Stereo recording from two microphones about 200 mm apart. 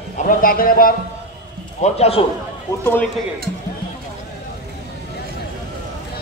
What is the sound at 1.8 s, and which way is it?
Speech, 30° left (ahead or behind).